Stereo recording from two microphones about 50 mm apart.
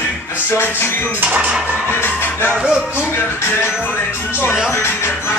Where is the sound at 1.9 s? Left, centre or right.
Left.